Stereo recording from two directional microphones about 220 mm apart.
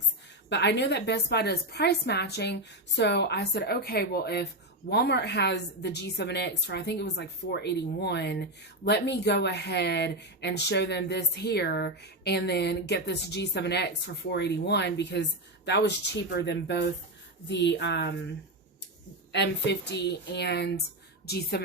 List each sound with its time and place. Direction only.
0.5 s a woman's voice: 50° left (ahead or behind)
19.3 s a woman's voice: 50° left (ahead or behind)